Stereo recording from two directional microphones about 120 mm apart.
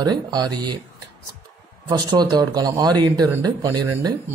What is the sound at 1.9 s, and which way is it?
Speech, 35° right (ahead or behind).